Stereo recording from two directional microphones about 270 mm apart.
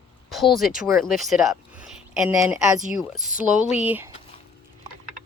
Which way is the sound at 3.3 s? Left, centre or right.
Left.